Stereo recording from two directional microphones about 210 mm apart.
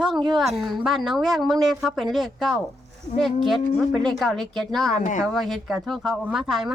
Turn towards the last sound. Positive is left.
turn(degrees=0)  # may be behind; listen again after turning